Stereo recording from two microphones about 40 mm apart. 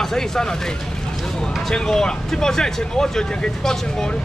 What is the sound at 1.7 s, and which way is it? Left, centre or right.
Speech, centre.